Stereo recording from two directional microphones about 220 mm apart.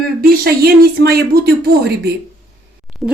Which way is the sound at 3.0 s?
10° right (ahead or behind).